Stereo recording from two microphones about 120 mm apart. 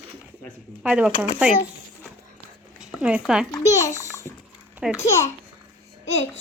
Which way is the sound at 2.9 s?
10° right (ahead or behind).